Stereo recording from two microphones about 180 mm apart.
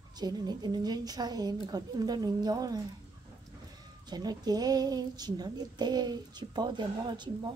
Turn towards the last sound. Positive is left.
turn(degrees=-25)  # may be behind; listen again after turning